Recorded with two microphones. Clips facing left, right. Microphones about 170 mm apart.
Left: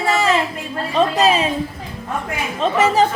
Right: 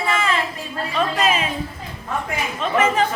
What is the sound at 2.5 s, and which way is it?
Speech, 35° left (ahead or behind).